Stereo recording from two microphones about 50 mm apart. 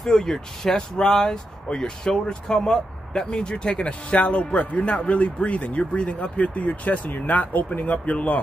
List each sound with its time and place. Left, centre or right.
0.0 s speech: centre; by 8.4 s left